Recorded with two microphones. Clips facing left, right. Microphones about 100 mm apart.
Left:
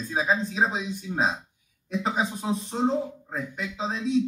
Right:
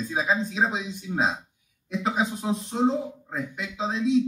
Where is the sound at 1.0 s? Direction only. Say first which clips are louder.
Right 1 dB; 5° right (ahead or behind).